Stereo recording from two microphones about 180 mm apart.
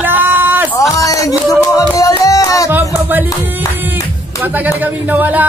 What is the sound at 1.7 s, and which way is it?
Music, 20° left (ahead or behind).